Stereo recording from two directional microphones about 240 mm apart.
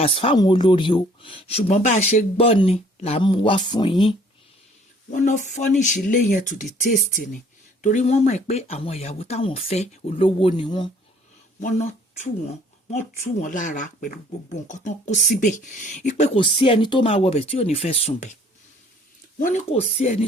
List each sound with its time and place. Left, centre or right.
0.0 s speech: left
5.1 s speech: left
19.4 s speech: left